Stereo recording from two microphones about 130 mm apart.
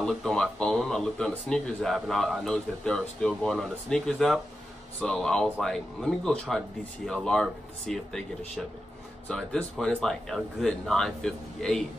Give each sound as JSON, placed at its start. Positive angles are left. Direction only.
{"t": 0.0, "sound": "speech", "side_deg": 0}